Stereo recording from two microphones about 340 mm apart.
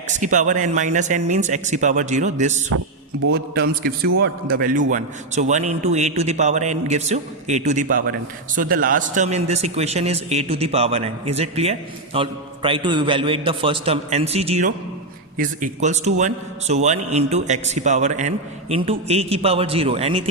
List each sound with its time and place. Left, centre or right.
0.1 s a man's voice: right